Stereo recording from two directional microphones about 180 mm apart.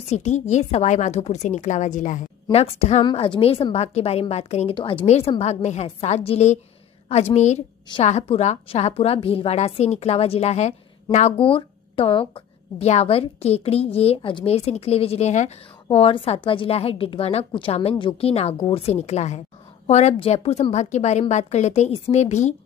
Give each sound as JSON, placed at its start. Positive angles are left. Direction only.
{"t": 0.0, "sound": "a woman's voice", "side_deg": 40}